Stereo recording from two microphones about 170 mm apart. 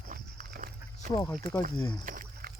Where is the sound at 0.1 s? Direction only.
55° right (ahead or behind).